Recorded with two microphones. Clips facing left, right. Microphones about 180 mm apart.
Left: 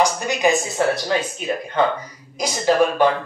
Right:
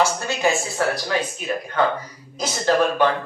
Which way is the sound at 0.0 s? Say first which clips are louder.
Left 2 dB; 15° left (ahead or behind).